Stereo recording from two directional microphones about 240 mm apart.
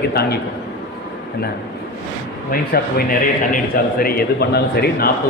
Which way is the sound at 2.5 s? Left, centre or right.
Left.